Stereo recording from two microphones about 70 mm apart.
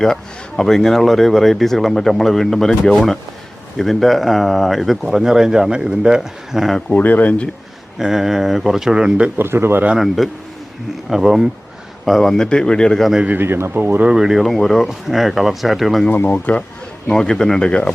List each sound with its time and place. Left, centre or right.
0.0 s speech: centre
6.9 s speech: left
7.9 s speech: centre
9.4 s speech: right
10.2 s speech: centre
13.2 s speech: right
14.1 s speech: centre
16.0 s speech: left
17.1 s speech: centre